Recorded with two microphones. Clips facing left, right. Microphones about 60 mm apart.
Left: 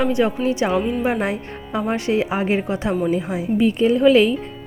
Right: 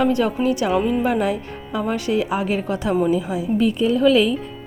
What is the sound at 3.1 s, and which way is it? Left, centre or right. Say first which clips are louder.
A woman's voice: right 1 dB; left.